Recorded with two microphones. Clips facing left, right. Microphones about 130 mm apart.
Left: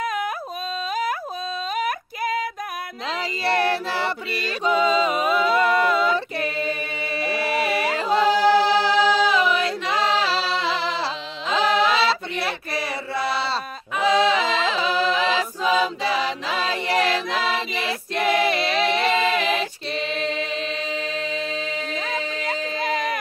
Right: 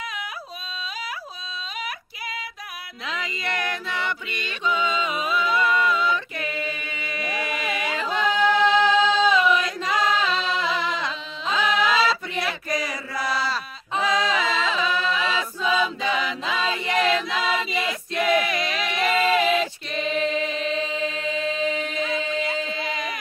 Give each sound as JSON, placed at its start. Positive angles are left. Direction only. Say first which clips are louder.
{"t": 0.0, "sound": "music", "louder": "left 9 dB", "side_deg": 45}
{"t": 1.8, "sound": "female singing", "louder": "left 9 dB", "side_deg": 45}
{"t": 3.1, "sound": "mantra", "louder": "left 6 dB", "side_deg": 35}
{"t": 7.2, "sound": "music", "louder": "left 6 dB", "side_deg": 30}
{"t": 11.5, "sound": "chant", "louder": "left 2 dB", "side_deg": 30}
{"t": 14.0, "sound": "music", "louder": "left 5 dB", "side_deg": 30}
{"t": 15.6, "sound": "choir", "louder": "left 1 dB", "side_deg": 35}
{"t": 19.5, "sound": "a capella", "louder": "right 1 dB", "side_deg": 35}